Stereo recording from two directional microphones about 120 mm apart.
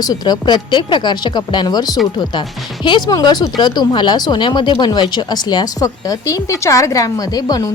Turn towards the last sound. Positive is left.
turn(degrees=30)  # may be behind; listen again after turning